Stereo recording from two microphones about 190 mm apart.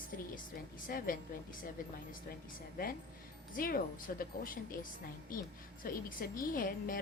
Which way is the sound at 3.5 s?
50° left (ahead or behind).